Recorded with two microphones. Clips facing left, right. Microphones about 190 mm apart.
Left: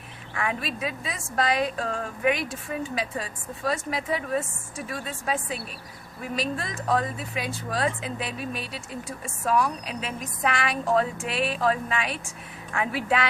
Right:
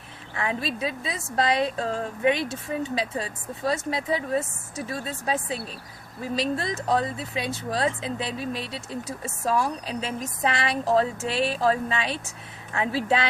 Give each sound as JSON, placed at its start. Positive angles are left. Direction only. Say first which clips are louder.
{"t": 0.3, "sound": "speech", "louder": "right 1 dB", "side_deg": -25}